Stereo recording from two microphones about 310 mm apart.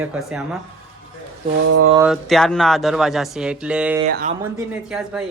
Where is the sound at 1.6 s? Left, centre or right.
Right.